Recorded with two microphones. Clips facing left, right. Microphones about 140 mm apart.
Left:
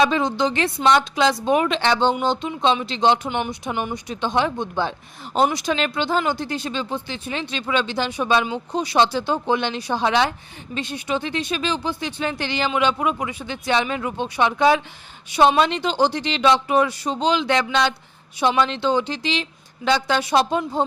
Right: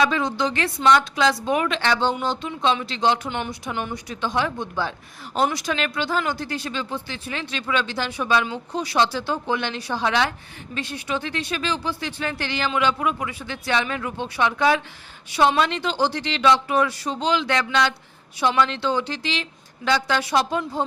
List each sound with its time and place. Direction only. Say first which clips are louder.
0.0 s a woman's voice: left 3 dB; 25° left (ahead or behind)